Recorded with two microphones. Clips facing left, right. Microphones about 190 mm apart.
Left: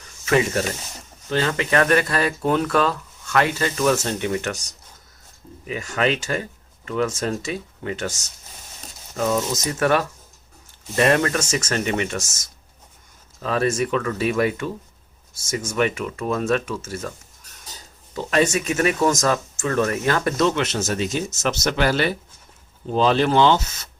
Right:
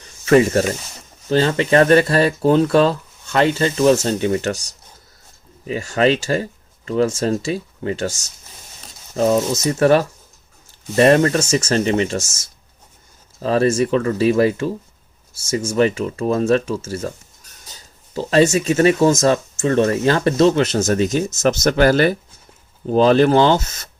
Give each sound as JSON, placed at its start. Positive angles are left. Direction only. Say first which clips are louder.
{"t": 0.0, "sound": "snake", "louder": "right 7 dB", "side_deg": -40}
{"t": 1.3, "sound": "speech", "louder": "right 6 dB", "side_deg": -30}
{"t": 9.1, "sound": "speech", "louder": "right 6 dB", "side_deg": -30}
{"t": 18.1, "sound": "speech", "louder": "right 5 dB", "side_deg": -30}